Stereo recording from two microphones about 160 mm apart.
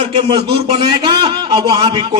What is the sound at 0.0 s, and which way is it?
A man's voice, 35° right (ahead or behind).